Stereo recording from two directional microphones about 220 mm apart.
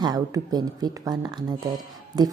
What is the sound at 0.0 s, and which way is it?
Speech, 15° right (ahead or behind).